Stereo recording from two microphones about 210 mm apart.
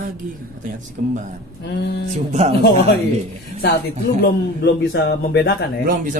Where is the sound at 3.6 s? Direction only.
50° left (ahead or behind).